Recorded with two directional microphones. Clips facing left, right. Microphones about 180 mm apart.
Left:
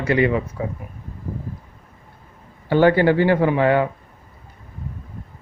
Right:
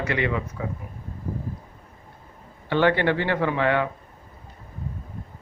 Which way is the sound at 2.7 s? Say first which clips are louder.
Left 6 dB; 35° left (ahead or behind).